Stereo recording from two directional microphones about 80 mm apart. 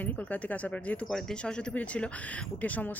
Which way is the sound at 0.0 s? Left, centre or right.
Left.